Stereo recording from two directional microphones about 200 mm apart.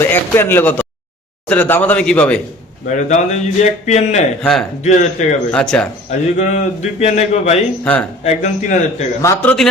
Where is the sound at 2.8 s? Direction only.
35° left (ahead or behind).